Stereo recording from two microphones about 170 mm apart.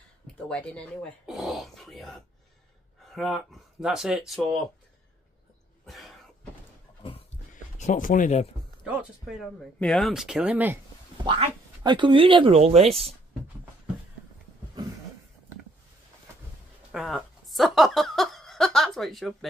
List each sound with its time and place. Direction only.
0.5 s speech: 5° left (ahead or behind)
5.9 s cough: centre (ahead or behind)
7.0 s dog: 35° left (ahead or behind)
7.5 s speech: 45° left (ahead or behind)
8.8 s speech: 5° right (ahead or behind)
11.2 s speech: 30° right (ahead or behind)
16.9 s chuckle: centre (ahead or behind)